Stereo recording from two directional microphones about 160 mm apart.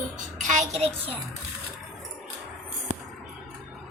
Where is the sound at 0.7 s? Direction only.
40° right (ahead or behind).